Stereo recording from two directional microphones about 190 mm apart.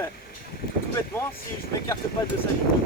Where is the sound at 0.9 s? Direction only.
10° left (ahead or behind).